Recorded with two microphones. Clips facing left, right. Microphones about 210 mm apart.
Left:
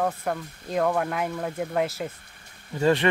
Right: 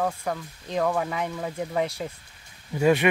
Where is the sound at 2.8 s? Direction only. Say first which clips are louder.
Right 1 dB; 10° right (ahead or behind).